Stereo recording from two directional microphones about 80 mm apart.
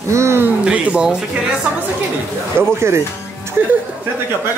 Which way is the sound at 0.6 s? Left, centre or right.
Centre.